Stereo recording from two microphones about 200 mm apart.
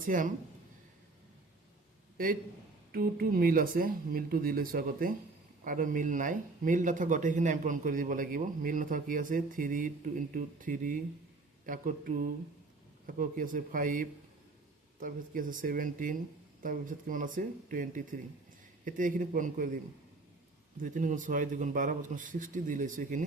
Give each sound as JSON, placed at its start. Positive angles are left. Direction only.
{"t": 0.0, "sound": "speech", "side_deg": -40}
{"t": 2.1, "sound": "a man's voice", "side_deg": -45}
{"t": 20.7, "sound": "speech", "side_deg": -40}